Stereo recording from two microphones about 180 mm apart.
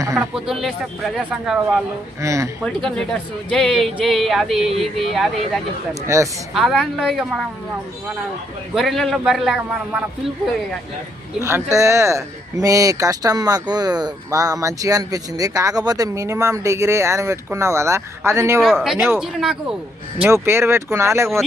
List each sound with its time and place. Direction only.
0.0 s speech: 15° right (ahead or behind)
0.3 s speech: centre (ahead or behind)
2.2 s speech: 15° right (ahead or behind)
2.6 s speech: 5° left (ahead or behind)
5.9 s speech: 15° right (ahead or behind)
6.5 s speech: centre (ahead or behind)
8.7 s speech: centre (ahead or behind)
11.4 s speech: 15° right (ahead or behind)
18.6 s speech: centre (ahead or behind)
20.2 s speech: 15° right (ahead or behind)